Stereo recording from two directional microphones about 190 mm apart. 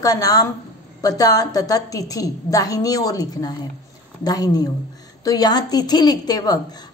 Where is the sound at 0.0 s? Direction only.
20° left (ahead or behind).